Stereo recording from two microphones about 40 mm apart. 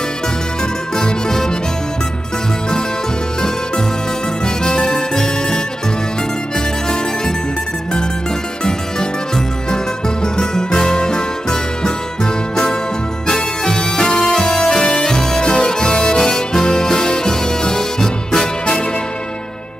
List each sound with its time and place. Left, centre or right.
0.9 s music: centre
4.6 s music: left
9.7 s music: centre
13.3 s music: centre
15.4 s music: left